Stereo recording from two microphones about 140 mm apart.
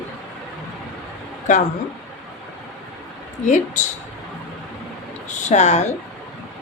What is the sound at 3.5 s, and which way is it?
Speech, 60° left (ahead or behind).